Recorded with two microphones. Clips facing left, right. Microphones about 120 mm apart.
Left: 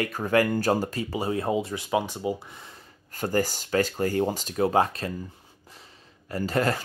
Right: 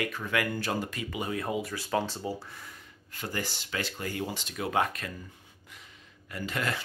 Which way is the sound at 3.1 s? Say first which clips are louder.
Left 10 dB; 45° left (ahead or behind).